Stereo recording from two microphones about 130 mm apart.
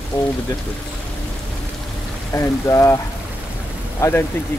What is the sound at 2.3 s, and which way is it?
Speech, 25° left (ahead or behind).